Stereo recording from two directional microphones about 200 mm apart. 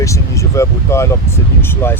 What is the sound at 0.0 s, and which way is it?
Speech, 15° left (ahead or behind).